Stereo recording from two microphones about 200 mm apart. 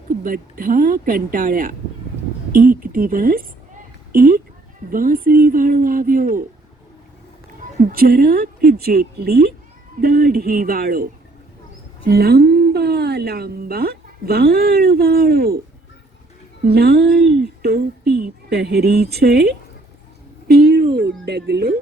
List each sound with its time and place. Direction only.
0.2 s speech: 45° right (ahead or behind)
7.8 s a woman's voice: 45° right (ahead or behind)
16.6 s speech: 55° right (ahead or behind)
17.6 s a sound: 55° right (ahead or behind)
18.1 s speech: 55° right (ahead or behind)
20.5 s a sound: 50° right (ahead or behind)
21.2 s speech: 55° right (ahead or behind)